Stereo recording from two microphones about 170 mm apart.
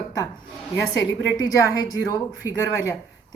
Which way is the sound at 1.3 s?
20° left (ahead or behind).